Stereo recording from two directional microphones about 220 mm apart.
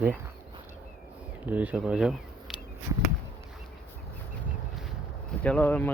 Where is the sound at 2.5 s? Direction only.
Centre (ahead or behind).